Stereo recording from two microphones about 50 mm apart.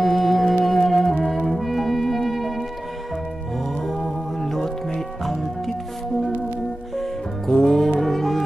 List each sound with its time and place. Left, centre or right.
0.0 s music: centre
3.8 s music: centre
7.0 s music: centre